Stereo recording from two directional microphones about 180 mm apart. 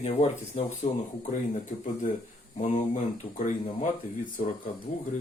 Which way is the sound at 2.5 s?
40° left (ahead or behind).